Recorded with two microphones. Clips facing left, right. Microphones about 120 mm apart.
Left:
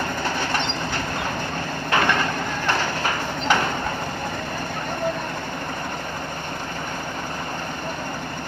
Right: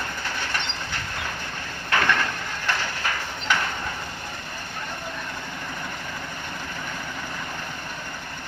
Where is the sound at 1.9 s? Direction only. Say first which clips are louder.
Left 2 dB; 20° left (ahead or behind).